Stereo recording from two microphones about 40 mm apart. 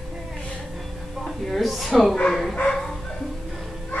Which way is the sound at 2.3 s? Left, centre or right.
Centre.